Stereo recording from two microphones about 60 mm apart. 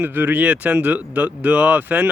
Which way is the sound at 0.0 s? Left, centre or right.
Right.